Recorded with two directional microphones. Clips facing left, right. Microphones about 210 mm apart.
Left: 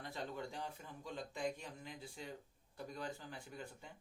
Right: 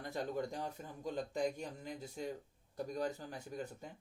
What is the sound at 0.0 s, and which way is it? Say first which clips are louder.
Speech: right 6 dB; 45° right (ahead or behind).